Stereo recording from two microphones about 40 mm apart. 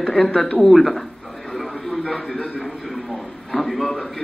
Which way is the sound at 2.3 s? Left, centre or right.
Left.